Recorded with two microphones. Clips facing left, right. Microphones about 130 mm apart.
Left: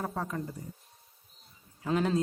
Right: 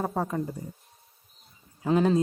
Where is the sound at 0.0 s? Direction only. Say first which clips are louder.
Right 6 dB; 30° right (ahead or behind).